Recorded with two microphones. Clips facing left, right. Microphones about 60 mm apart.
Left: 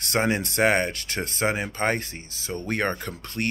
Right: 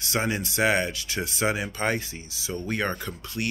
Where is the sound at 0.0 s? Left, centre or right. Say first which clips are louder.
Left 3 dB; left.